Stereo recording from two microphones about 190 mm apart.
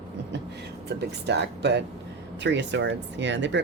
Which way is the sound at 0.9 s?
60° right (ahead or behind).